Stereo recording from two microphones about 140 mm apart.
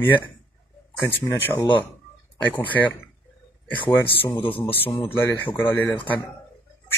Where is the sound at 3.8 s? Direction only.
15° left (ahead or behind).